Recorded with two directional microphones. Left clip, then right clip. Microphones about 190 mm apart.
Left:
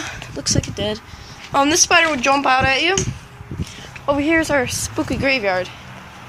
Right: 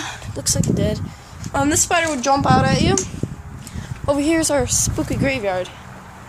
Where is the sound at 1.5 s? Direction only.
5° left (ahead or behind).